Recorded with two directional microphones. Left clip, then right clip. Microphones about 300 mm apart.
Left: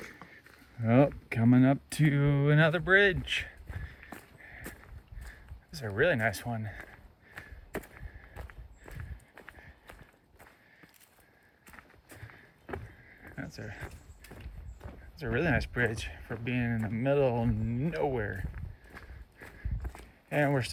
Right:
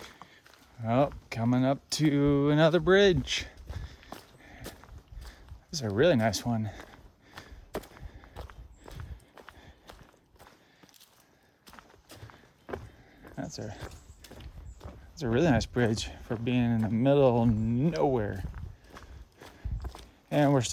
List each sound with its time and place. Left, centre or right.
0.9 s speech: centre
5.2 s a sound: centre
7.9 s walk: centre
11.6 s walk: centre
13.7 s speech: centre
18.3 s walk: centre